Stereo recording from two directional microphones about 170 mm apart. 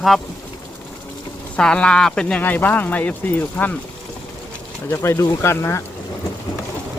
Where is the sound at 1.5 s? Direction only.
5° left (ahead or behind).